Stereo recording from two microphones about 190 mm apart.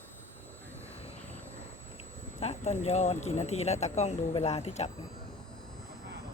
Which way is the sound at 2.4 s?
35° left (ahead or behind).